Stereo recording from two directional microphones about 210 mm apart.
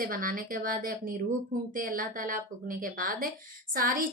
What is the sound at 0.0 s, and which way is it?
A woman's voice, 40° right (ahead or behind).